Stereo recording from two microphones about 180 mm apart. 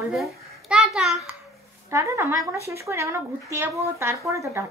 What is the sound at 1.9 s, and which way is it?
A woman's voice, 15° right (ahead or behind).